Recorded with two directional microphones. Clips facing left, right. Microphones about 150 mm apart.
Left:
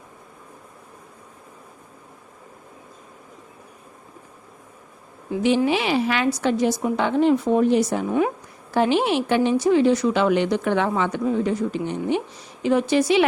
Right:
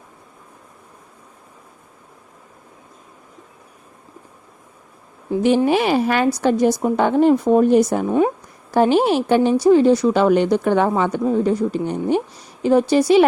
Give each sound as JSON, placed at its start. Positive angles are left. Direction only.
{"t": 5.6, "sound": "a woman's voice", "side_deg": -45}
{"t": 8.7, "sound": "a woman's voice", "side_deg": -45}